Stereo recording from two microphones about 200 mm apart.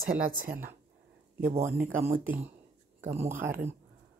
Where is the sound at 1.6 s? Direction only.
10° right (ahead or behind).